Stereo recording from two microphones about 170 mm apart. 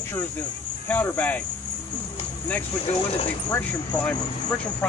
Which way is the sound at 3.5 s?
10° left (ahead or behind).